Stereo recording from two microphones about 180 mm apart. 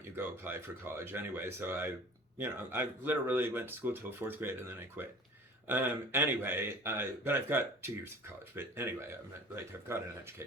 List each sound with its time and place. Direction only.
0.2 s speech: 15° right (ahead or behind)